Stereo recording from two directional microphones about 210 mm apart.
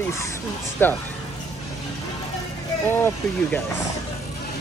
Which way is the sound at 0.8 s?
10° left (ahead or behind).